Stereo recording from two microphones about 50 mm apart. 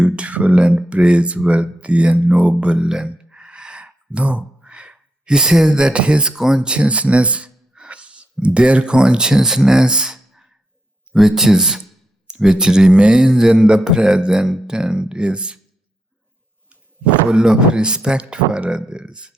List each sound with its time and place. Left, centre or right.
0.0 s speech: right
17.2 s speech: centre